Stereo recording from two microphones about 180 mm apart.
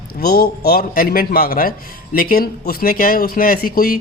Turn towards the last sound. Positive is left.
turn(degrees=55)  # may be behind; listen again after turning